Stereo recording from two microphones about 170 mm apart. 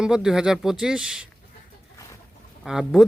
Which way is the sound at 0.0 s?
5° right (ahead or behind).